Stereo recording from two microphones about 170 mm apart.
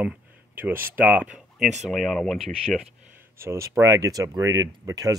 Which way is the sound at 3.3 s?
15° right (ahead or behind).